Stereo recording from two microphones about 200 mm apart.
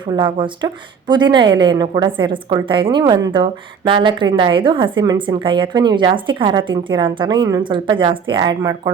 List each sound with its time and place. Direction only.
0.2 s a woman's voice: 25° right (ahead or behind)